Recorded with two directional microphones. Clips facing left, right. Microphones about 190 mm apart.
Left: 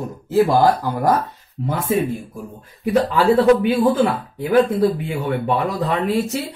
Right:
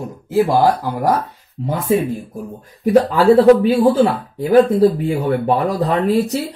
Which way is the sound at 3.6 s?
35° right (ahead or behind).